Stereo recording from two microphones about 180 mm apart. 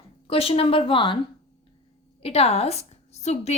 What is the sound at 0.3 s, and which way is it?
Speech, 30° left (ahead or behind).